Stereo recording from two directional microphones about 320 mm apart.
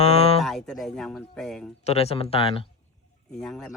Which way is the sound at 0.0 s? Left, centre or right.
Centre.